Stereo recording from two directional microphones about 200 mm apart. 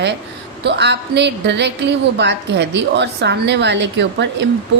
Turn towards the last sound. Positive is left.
turn(degrees=-60)  # may be behind; listen again after turning